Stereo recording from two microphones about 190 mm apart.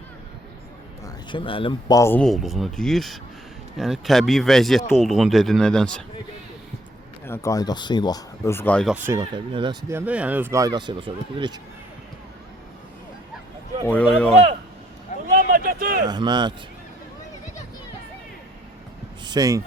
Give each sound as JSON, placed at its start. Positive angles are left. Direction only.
{"t": 1.0, "sound": "speech", "side_deg": 25}
{"t": 7.3, "sound": "speech", "side_deg": 15}
{"t": 9.0, "sound": "speech", "side_deg": -20}
{"t": 9.9, "sound": "speech", "side_deg": -5}
{"t": 13.8, "sound": "speech", "side_deg": 5}
{"t": 15.3, "sound": "a sound", "side_deg": -50}
{"t": 16.0, "sound": "speech", "side_deg": -20}
{"t": 19.2, "sound": "speech", "side_deg": -20}